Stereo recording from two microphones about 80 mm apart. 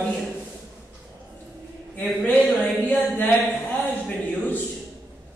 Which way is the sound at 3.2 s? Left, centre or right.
Left.